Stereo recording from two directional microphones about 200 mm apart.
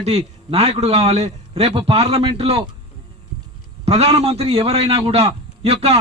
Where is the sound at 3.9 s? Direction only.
30° right (ahead or behind).